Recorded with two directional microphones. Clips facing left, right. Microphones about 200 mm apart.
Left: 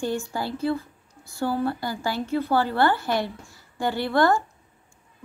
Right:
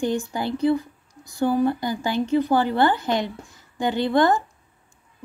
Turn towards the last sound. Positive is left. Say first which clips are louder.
# right 2 dB
turn(degrees=-20)  # may be behind; listen again after turning